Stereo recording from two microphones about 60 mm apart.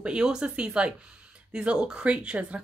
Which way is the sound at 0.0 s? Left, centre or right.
Centre.